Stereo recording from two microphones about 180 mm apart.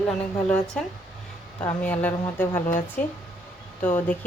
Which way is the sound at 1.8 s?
10° left (ahead or behind).